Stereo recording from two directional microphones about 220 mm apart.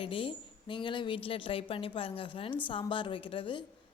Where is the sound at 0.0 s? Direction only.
25° left (ahead or behind).